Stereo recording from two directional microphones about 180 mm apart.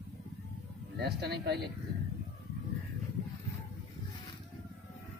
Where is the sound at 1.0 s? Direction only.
65° right (ahead or behind).